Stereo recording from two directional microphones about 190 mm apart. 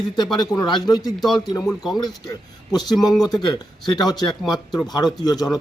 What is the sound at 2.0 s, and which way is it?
A man's voice, 20° left (ahead or behind).